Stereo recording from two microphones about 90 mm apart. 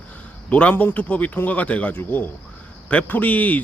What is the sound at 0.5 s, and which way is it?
A man's voice, 15° left (ahead or behind).